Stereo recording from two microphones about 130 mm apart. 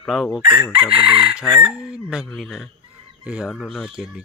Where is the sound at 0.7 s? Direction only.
45° right (ahead or behind).